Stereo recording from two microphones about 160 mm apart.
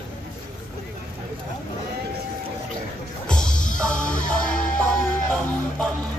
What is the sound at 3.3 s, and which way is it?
Music, 5° left (ahead or behind).